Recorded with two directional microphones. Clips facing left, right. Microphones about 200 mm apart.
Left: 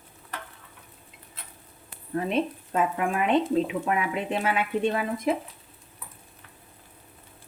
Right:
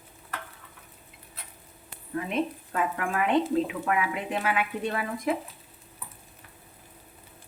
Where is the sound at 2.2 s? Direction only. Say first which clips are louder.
Left 3 dB; 30° left (ahead or behind).